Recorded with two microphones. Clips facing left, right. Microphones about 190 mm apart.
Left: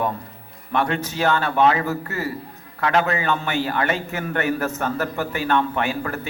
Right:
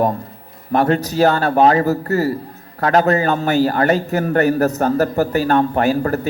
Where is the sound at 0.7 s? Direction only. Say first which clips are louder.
Right 7 dB; 40° right (ahead or behind).